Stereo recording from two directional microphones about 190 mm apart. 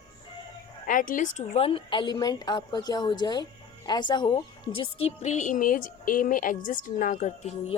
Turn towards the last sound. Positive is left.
turn(degrees=40)  # may be behind; listen again after turning